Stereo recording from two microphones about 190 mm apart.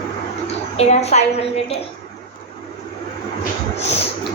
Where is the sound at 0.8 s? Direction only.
35° left (ahead or behind).